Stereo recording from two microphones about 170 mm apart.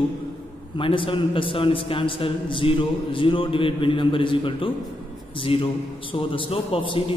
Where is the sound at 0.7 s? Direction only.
30° left (ahead or behind).